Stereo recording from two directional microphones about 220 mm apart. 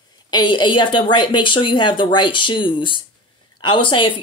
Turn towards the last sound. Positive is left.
turn(degrees=20)  # may be behind; listen again after turning